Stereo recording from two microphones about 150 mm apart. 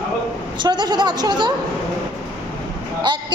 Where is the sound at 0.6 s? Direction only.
30° right (ahead or behind).